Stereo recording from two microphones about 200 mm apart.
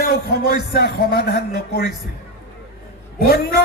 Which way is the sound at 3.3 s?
50° left (ahead or behind).